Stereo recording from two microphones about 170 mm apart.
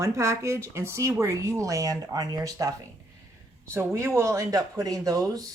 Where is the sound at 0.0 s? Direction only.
15° right (ahead or behind).